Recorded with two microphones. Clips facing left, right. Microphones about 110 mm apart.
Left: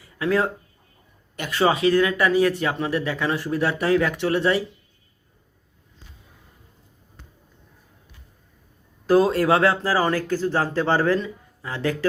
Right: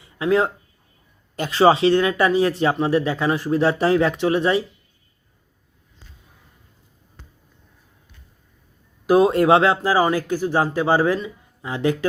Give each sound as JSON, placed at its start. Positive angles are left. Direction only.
{"t": 0.0, "sound": "a sound", "side_deg": -25}
{"t": 1.4, "sound": "speech", "side_deg": -30}
{"t": 9.0, "sound": "speech", "side_deg": -20}